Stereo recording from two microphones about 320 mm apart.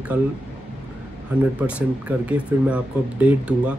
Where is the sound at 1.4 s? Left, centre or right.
Centre.